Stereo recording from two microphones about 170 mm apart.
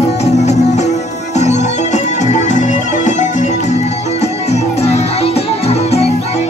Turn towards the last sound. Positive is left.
turn(degrees=40)  # may be behind; listen again after turning